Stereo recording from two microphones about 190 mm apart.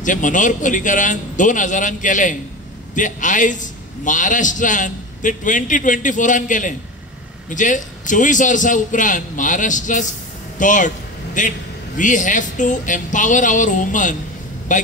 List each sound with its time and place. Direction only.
0.0 s a man's voice: 40° left (ahead or behind)